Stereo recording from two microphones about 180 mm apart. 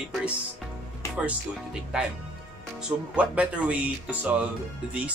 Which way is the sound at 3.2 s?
5° right (ahead or behind).